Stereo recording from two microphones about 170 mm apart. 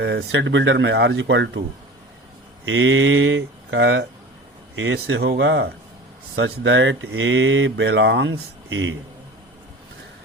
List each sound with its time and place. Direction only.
0.0 s speech: 85° right
2.6 s speech: 90° right